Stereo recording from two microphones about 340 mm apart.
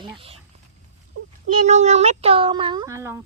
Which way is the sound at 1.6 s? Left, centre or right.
Centre.